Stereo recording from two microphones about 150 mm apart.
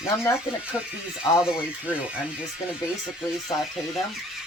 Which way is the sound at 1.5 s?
10° right (ahead or behind).